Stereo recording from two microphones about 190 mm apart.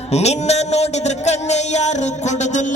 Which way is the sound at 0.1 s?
35° left (ahead or behind).